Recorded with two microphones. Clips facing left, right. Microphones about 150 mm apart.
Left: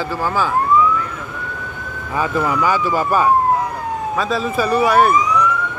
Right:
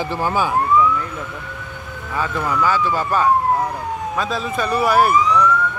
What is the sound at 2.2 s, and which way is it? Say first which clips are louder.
Speech: left 2 dB; 10° left (ahead or behind).